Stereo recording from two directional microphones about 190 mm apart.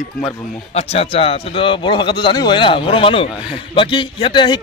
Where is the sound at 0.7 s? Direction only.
30° left (ahead or behind).